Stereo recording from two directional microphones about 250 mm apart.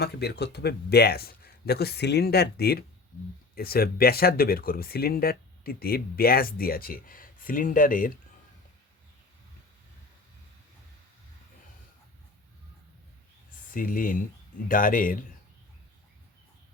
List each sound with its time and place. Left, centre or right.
0.0 s speech: left
13.7 s speech: left